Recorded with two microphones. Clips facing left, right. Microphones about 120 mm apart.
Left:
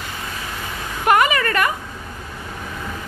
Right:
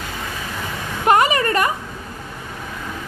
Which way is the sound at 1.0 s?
30° right (ahead or behind).